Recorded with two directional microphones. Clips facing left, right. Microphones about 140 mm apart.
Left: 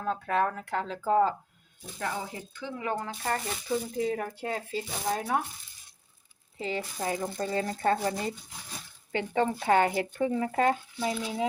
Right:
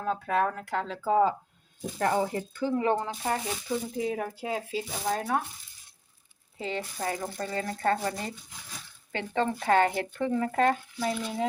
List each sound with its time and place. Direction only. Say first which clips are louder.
0.0 s speech: right 1 dB; centre (ahead or behind)
2.0 s speech: right 8 dB; 55° right (ahead or behind)
2.7 s speech: right 6 dB; 30° right (ahead or behind)
3.1 s speech: right 1 dB; 10° right (ahead or behind)
6.6 s speech: even; centre (ahead or behind)
7.0 s speech: left 2 dB; 20° left (ahead or behind)
9.1 s speech: left 1 dB; 15° left (ahead or behind)